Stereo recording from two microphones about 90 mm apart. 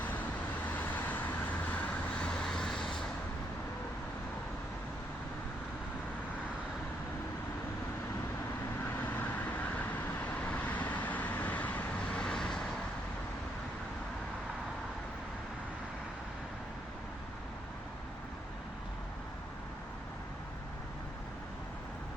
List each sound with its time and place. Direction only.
0.7 s vehicle: 20° left (ahead or behind)
9.0 s vehicle: 20° left (ahead or behind)